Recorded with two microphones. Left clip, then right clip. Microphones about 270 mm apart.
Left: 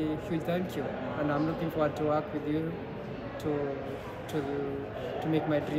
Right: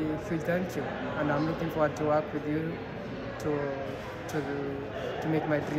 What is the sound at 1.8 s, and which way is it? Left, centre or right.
Speech, centre.